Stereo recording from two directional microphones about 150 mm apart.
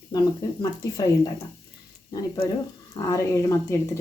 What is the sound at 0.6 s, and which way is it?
Speech, 25° left (ahead or behind).